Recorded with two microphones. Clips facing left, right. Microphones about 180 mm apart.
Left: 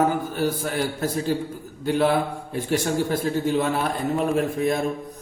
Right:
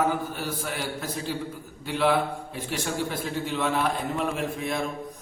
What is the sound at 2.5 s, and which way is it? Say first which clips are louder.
A man's voice: left 12 dB; 45° left (ahead or behind).